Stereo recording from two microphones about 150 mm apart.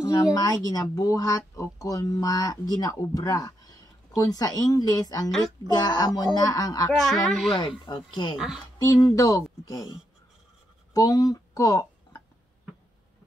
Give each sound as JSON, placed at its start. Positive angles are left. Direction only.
{"t": 0.0, "sound": "speech", "side_deg": 25}
{"t": 7.0, "sound": "speech", "side_deg": 0}
{"t": 7.8, "sound": "speech", "side_deg": 30}
{"t": 10.9, "sound": "a sound", "side_deg": 25}